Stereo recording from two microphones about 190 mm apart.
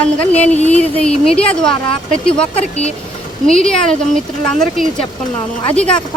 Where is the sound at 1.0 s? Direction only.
5° left (ahead or behind).